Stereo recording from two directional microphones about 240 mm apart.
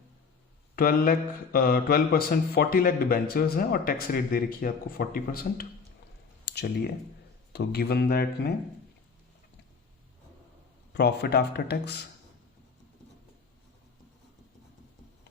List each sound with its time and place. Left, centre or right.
0.8 s a man's voice: left
10.9 s speech: left